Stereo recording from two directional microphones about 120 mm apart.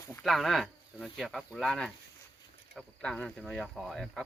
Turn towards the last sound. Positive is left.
turn(degrees=0)  # may be behind; listen again after turning